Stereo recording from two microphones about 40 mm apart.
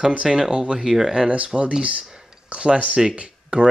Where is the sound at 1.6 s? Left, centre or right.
Right.